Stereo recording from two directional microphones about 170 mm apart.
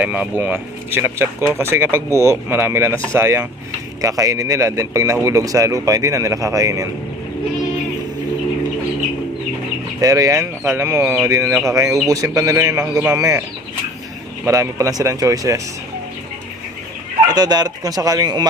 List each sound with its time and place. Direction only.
0.0 s a man's voice: 10° right (ahead or behind)
10.0 s a man's voice: 20° right (ahead or behind)
14.4 s a man's voice: 15° right (ahead or behind)
17.2 s a man's voice: 25° right (ahead or behind)